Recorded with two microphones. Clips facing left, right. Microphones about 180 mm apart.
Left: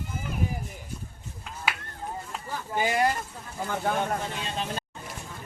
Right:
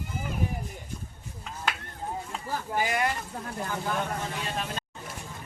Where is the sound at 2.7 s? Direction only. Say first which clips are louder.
Left 3 dB; 30° left (ahead or behind).